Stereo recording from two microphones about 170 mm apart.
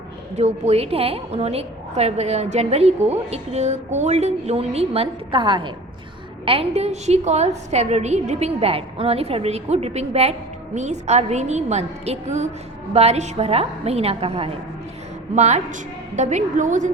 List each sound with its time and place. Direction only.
0.3 s a woman's voice: 40° right (ahead or behind)